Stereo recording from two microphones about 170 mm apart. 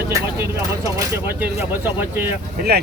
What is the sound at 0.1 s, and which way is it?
Speech, 15° right (ahead or behind).